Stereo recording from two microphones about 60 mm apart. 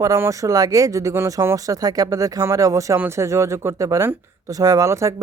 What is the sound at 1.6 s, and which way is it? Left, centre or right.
Speech, right.